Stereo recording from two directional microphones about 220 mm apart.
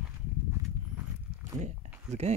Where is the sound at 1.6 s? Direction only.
30° right (ahead or behind).